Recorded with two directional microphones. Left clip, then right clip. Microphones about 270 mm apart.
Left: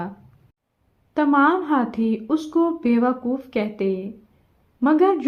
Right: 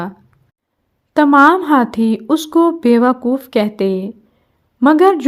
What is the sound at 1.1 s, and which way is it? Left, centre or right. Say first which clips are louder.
A woman's voice: right 9 dB; right.